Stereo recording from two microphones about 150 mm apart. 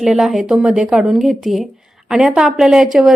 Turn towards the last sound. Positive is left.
turn(degrees=0)  # may be behind; listen again after turning